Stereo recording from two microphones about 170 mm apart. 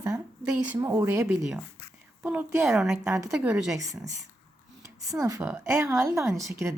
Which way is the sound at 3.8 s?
20° right (ahead or behind).